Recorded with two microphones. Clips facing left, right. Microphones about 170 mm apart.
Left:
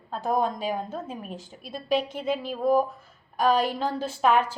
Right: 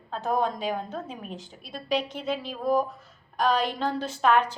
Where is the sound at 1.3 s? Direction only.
45° left (ahead or behind).